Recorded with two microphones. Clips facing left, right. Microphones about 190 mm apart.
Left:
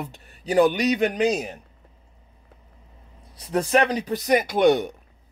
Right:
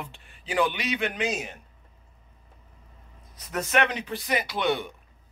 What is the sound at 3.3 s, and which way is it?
Speech, 30° left (ahead or behind).